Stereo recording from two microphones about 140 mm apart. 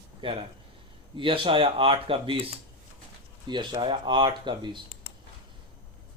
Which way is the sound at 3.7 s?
35° right (ahead or behind).